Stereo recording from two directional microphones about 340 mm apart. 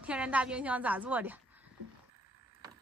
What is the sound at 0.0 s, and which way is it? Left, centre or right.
A woman's voice, centre.